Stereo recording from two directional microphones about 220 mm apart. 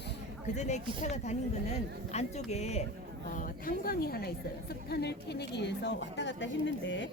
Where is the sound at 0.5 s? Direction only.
30° left (ahead or behind).